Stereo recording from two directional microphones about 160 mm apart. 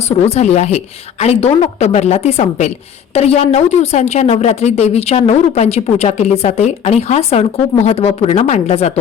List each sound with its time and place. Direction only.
0.3 s a woman's voice: 45° left (ahead or behind)